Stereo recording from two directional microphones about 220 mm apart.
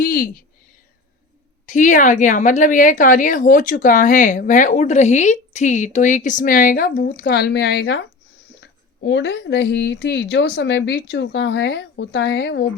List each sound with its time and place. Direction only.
0.0 s speech: 40° left (ahead or behind)
1.6 s a woman's voice: 35° left (ahead or behind); by 12.6 s 50° left (ahead or behind)